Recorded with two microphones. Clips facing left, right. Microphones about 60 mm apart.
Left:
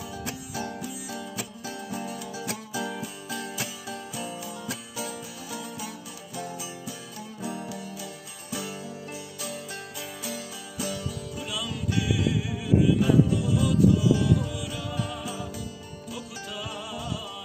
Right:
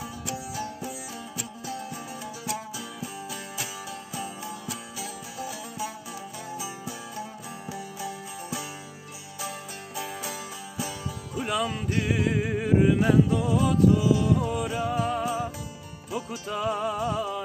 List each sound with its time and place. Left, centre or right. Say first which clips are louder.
4.9 s music: left 1 dB; right
7.2 s music: left 2 dB; right
9.9 s music: right 5 dB; right
11.4 s music: right 6 dB; right